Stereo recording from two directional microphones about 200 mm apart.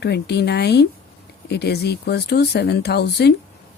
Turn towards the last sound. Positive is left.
turn(degrees=55)  # may be behind; listen again after turning